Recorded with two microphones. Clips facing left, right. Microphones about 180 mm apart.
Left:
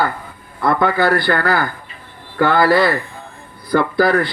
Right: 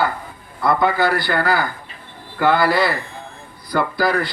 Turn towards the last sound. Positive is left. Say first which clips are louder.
# left 4 dB
turn(degrees=55)  # may be behind; listen again after turning